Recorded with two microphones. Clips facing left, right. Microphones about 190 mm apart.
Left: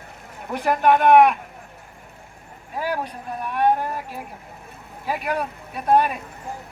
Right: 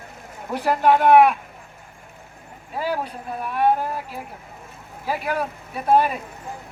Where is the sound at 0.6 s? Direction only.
10° right (ahead or behind).